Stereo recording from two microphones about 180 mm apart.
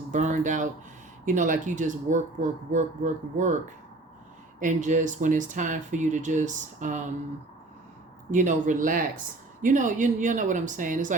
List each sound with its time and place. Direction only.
0.1 s speech: 40° right (ahead or behind)
4.6 s speech: 40° right (ahead or behind)
8.3 s speech: 45° right (ahead or behind)